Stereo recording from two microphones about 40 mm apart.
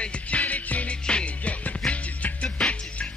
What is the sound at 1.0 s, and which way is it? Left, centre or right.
Music, left.